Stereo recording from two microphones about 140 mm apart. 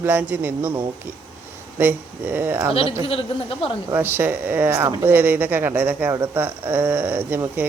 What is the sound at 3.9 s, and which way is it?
Speech, 15° right (ahead or behind).